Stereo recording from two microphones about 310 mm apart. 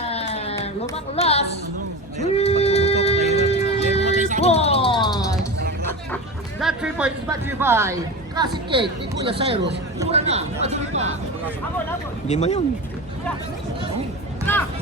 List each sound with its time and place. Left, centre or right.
0.1 s a sound: centre
1.1 s speech: centre
2.3 s music: centre
4.4 s a sound: centre
6.6 s speech: centre; by 11.1 s right
12.3 s speech: left